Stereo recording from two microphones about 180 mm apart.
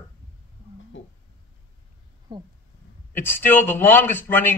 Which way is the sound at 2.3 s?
25° right (ahead or behind).